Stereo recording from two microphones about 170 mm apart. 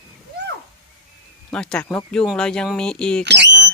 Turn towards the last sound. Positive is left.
turn(degrees=15)  # may be behind; listen again after turning